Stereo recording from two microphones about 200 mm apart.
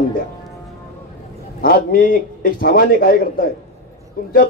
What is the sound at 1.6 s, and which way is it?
A man's voice, 45° left (ahead or behind).